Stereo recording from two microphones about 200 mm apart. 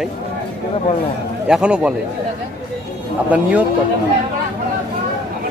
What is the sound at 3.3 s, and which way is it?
Speech, 5° right (ahead or behind).